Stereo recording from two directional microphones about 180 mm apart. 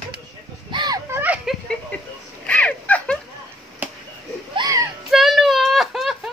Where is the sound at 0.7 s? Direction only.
25° right (ahead or behind).